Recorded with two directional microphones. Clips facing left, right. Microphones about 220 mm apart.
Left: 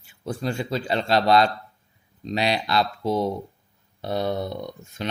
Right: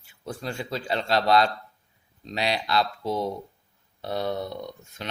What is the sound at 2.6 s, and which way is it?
Speech, 20° left (ahead or behind).